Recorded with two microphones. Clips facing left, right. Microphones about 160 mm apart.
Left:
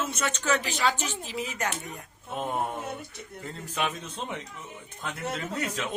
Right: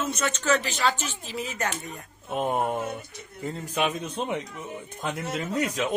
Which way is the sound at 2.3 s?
20° right (ahead or behind).